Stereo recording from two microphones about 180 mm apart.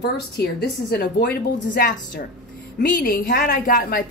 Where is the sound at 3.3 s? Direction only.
55° left (ahead or behind).